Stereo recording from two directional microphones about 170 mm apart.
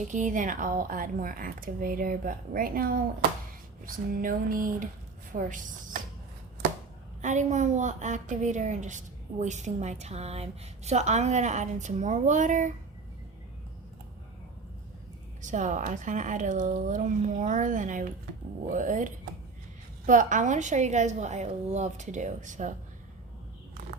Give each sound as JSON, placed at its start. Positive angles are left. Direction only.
{"t": 0.0, "sound": "a woman's voice", "side_deg": -45}
{"t": 7.2, "sound": "a woman's voice", "side_deg": -45}
{"t": 15.4, "sound": "a woman's voice", "side_deg": -45}